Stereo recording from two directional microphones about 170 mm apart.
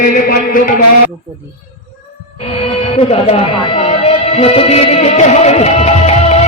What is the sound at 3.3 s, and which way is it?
Speech, 35° left (ahead or behind).